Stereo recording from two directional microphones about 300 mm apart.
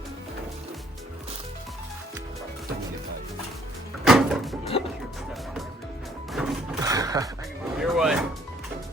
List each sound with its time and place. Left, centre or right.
4.0 s music: centre
4.7 s music: centre
6.3 s music: centre
6.9 s music: centre
7.8 s a sound: centre